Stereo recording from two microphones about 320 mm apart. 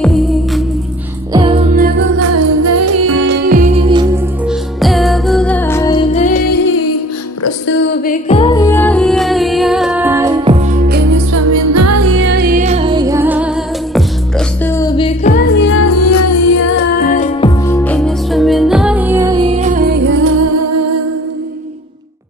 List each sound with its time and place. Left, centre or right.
0.0 s music: centre
1.3 s music: centre
2.1 s music: right; by 4.0 s centre
4.5 s music: centre; by 6.8 s left
8.0 s music: left; by 10.8 s centre
11.3 s music: right; by 13.5 s centre
14.6 s music: centre
15.2 s music: left
16.7 s music: left
17.6 s music: centre; by 20.2 s right